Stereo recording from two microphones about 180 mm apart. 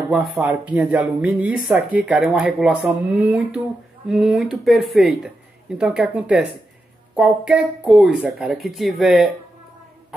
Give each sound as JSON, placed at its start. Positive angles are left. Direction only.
{"t": 0.1, "sound": "speech", "side_deg": -5}